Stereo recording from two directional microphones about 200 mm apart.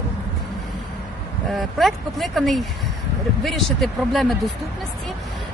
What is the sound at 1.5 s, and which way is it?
Speech, centre (ahead or behind).